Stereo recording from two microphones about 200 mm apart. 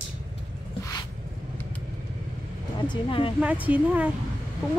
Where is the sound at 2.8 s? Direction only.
25° left (ahead or behind).